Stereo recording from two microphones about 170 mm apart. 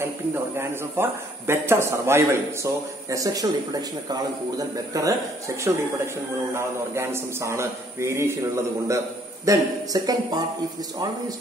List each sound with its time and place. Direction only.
0.0 s speech: 15° right (ahead or behind)
6.5 s speech: 15° right (ahead or behind)